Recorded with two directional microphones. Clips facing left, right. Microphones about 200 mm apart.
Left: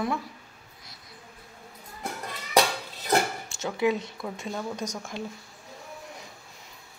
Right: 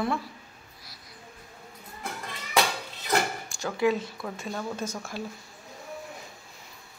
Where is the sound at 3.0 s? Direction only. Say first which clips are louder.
Left 2 dB; 25° left (ahead or behind).